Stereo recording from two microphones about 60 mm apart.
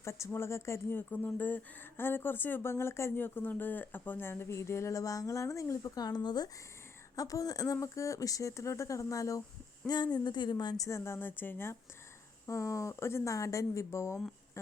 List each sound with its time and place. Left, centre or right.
0.0 s speech: left
0.9 s speech: left
9.9 s speech: left
10.8 s speech: left
12.5 s speech: left
13.3 s speech: left